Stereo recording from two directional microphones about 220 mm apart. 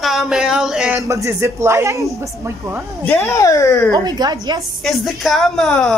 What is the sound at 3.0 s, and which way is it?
Speech, 10° left (ahead or behind).